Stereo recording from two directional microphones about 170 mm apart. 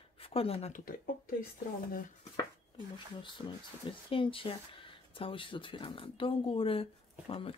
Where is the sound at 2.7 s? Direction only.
30° left (ahead or behind).